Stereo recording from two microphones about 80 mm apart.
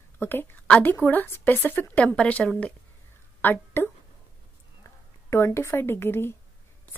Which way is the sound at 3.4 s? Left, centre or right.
Left.